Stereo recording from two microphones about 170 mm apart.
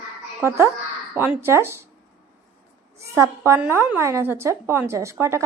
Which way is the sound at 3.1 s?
15° right (ahead or behind).